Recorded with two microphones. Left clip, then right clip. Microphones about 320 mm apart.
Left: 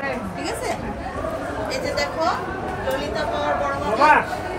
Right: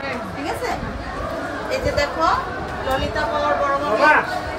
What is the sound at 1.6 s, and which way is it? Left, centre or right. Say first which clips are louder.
Speech: right 4 dB; centre.